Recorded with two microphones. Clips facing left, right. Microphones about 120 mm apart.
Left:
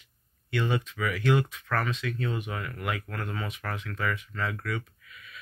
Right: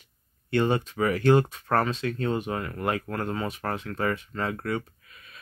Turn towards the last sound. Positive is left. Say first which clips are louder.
# right 4 dB
turn(degrees=-35)  # may be behind; listen again after turning